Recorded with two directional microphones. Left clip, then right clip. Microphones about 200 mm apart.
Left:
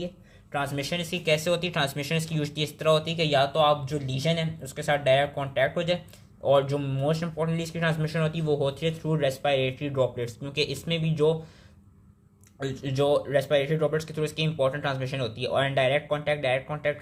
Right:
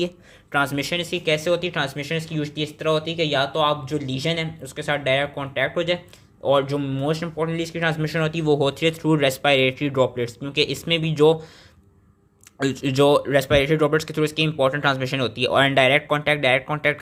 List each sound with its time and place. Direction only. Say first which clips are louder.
0.5 s speech: right 7 dB; 30° right (ahead or behind)
12.5 s speech: right 8 dB; 40° right (ahead or behind)